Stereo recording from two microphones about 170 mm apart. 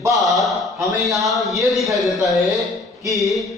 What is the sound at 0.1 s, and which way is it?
A man's voice, centre (ahead or behind).